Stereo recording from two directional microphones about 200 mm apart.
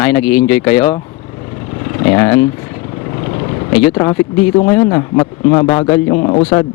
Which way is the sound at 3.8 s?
15° left (ahead or behind).